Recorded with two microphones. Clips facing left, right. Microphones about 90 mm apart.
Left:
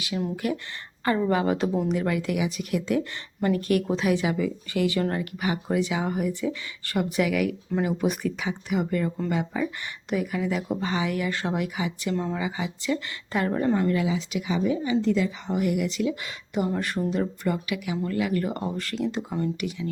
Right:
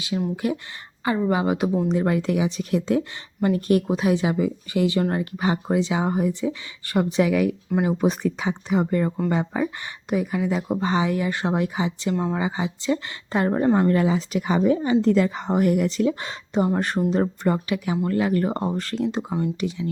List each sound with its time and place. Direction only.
0.1 s speech: 25° right (ahead or behind)
1.0 s speech: 15° right (ahead or behind)
13.9 s a woman's voice: 45° right (ahead or behind); by 19.9 s 30° right (ahead or behind)